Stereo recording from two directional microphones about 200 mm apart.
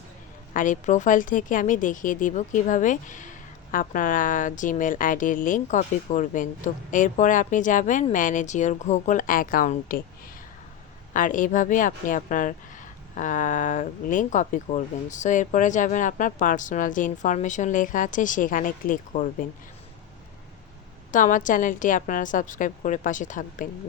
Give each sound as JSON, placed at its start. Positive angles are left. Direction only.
{"t": 0.5, "sound": "speech", "side_deg": 40}
{"t": 11.1, "sound": "speech", "side_deg": 40}
{"t": 21.1, "sound": "speech", "side_deg": 40}